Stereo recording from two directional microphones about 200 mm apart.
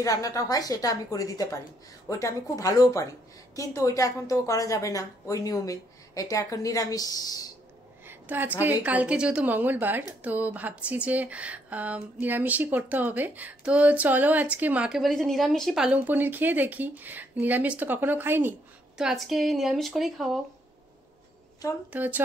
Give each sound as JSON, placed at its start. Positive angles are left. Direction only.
{"t": 0.0, "sound": "a woman's voice", "side_deg": 15}
{"t": 8.1, "sound": "a woman's voice", "side_deg": -10}
{"t": 21.9, "sound": "speech", "side_deg": -10}